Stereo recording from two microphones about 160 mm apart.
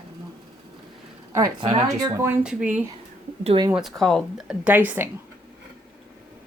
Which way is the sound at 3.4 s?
35° right (ahead or behind).